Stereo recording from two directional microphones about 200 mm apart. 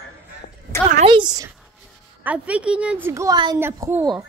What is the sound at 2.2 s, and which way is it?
Speech, 5° right (ahead or behind).